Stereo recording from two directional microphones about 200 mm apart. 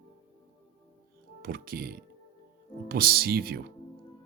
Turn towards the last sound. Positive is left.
turn(degrees=-50)  # may be behind; listen again after turning